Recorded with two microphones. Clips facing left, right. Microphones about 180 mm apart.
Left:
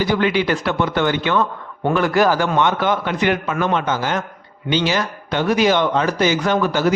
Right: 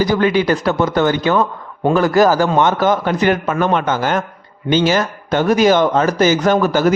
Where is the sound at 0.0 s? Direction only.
40° right (ahead or behind).